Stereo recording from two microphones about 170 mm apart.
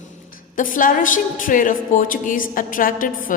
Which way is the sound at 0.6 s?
55° left (ahead or behind).